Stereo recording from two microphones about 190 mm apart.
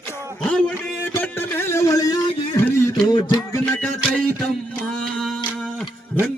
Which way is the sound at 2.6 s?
15° left (ahead or behind).